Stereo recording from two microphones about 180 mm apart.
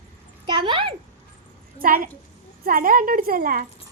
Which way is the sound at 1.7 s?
50° right (ahead or behind).